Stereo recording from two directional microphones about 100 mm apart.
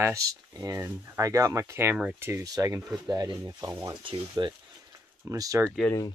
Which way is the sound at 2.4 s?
40° right (ahead or behind).